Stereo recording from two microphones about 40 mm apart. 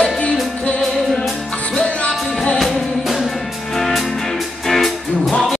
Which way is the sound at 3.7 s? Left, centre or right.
Centre.